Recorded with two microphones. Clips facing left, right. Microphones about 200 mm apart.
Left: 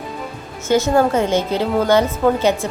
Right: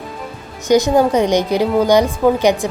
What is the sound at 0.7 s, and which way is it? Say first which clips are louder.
A woman's voice: right 3 dB; 15° right (ahead or behind).